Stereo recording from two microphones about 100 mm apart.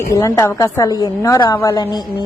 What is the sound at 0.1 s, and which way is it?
A woman's voice, 35° left (ahead or behind).